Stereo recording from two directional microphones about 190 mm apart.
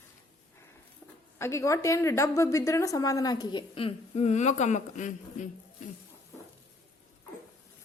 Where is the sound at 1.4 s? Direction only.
15° left (ahead or behind); by 5.4 s 40° left (ahead or behind).